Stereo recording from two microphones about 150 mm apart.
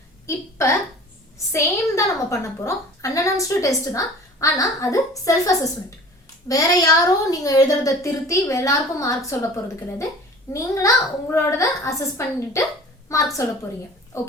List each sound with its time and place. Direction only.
0.3 s a woman's voice: 20° left (ahead or behind)
10.5 s a woman's voice: 20° left (ahead or behind)